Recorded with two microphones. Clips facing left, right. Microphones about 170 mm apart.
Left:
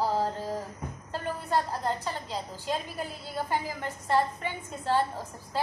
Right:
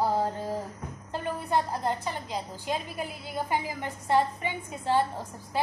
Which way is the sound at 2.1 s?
10° right (ahead or behind).